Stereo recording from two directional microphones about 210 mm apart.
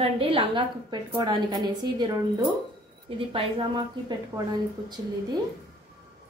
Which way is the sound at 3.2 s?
25° right (ahead or behind).